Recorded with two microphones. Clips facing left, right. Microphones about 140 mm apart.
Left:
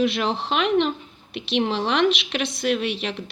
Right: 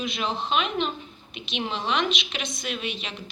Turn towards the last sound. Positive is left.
turn(degrees=65)  # may be behind; listen again after turning